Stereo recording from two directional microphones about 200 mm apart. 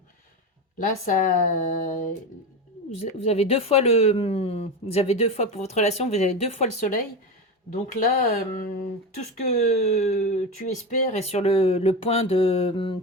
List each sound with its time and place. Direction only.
1.0 s speech: 40° left (ahead or behind)
11.1 s mantra: 30° left (ahead or behind)